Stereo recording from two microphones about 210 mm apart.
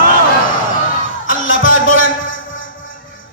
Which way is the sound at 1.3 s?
65° left (ahead or behind).